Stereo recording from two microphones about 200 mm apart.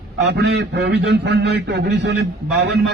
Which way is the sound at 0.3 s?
55° right (ahead or behind).